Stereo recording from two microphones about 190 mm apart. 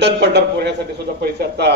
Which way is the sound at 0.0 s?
60° right (ahead or behind).